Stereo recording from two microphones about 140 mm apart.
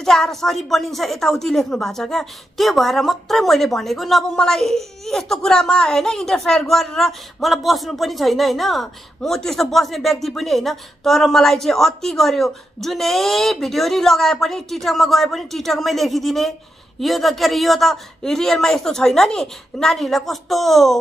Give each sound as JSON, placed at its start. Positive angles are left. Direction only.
{"t": 0.0, "sound": "a woman's voice", "side_deg": 5}